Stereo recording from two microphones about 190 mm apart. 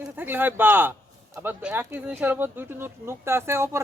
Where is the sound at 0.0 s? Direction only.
10° right (ahead or behind).